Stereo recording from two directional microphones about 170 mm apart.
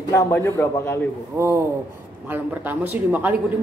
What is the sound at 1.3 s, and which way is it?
Speech, 15° right (ahead or behind).